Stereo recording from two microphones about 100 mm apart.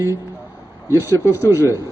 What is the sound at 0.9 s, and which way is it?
Speech, 20° right (ahead or behind).